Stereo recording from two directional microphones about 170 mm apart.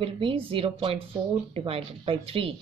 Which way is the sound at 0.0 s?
30° right (ahead or behind).